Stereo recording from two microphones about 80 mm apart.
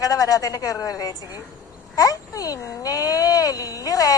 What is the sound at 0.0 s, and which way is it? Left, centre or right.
A woman's voice, left.